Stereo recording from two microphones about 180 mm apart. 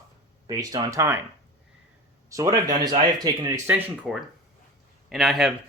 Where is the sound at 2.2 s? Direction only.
20° right (ahead or behind).